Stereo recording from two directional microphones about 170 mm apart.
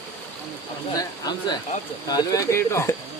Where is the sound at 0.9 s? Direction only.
25° left (ahead or behind).